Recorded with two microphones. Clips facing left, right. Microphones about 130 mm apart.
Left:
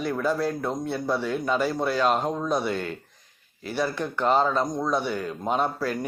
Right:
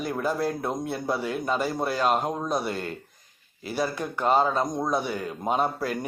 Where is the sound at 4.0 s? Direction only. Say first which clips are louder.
Even; 10° right (ahead or behind).